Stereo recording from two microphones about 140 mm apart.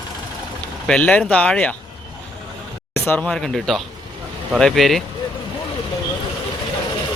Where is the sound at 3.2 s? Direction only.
5° left (ahead or behind).